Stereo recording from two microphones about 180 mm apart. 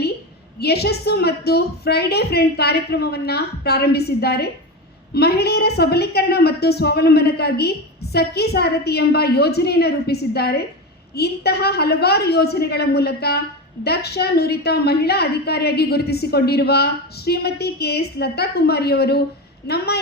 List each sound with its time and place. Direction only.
0.6 s a woman's voice: 65° left (ahead or behind)